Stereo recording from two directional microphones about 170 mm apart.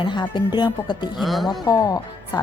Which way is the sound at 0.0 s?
25° left (ahead or behind).